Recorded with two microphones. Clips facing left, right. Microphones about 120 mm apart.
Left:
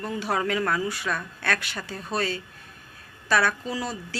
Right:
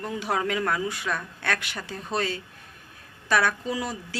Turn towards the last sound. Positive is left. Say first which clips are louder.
# even
turn(degrees=-15)  # may be behind; listen again after turning